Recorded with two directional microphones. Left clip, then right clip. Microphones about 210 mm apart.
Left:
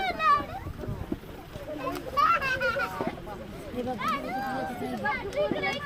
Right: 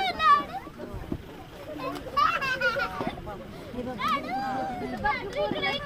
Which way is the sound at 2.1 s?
45° right (ahead or behind).